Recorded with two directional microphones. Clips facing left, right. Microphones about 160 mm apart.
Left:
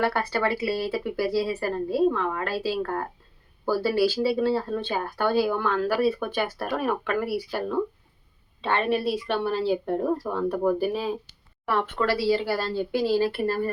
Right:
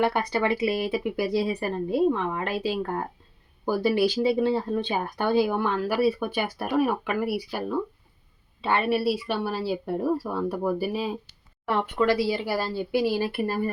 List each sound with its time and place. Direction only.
0.0 s speech: 20° right (ahead or behind)
8.6 s speech: 10° right (ahead or behind)